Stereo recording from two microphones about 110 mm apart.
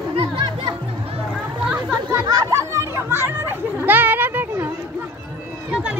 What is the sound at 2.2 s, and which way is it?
Children playing, 35° right (ahead or behind).